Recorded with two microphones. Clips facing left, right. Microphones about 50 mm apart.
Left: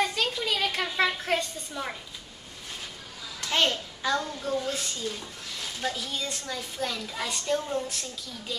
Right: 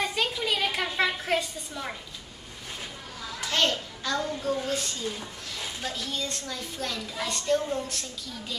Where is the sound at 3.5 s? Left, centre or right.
Centre.